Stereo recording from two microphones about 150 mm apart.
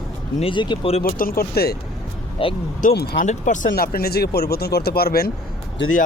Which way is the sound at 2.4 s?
35° left (ahead or behind).